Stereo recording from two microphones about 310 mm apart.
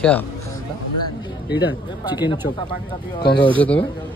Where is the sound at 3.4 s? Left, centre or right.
Centre.